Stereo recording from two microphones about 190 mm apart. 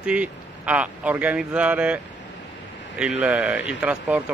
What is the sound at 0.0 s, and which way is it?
Speech, 5° right (ahead or behind).